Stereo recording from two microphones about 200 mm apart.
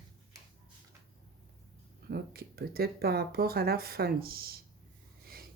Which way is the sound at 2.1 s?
50° right (ahead or behind).